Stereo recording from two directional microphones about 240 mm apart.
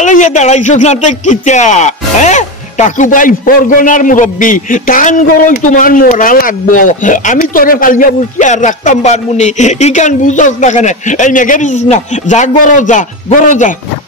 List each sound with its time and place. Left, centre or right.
0.0 s speech: left